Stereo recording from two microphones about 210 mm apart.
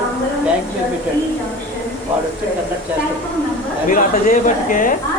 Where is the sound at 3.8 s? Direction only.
40° left (ahead or behind).